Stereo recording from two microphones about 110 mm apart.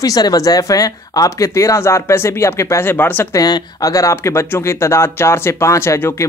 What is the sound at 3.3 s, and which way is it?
Speech, 35° left (ahead or behind).